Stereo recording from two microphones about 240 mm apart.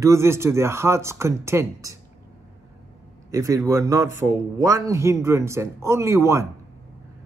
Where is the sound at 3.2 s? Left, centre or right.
Centre.